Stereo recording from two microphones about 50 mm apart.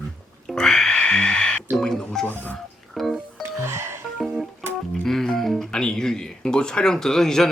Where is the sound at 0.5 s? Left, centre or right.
Centre.